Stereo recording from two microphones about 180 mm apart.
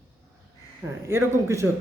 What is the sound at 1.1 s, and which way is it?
Speech, 15° right (ahead or behind).